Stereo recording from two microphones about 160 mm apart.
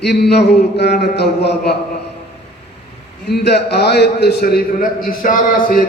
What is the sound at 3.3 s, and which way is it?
A man's voice, 90° left.